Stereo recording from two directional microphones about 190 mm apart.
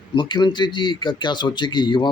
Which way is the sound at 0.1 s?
25° left (ahead or behind).